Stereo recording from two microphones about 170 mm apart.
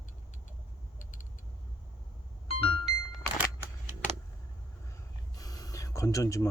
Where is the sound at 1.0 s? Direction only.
50° left (ahead or behind).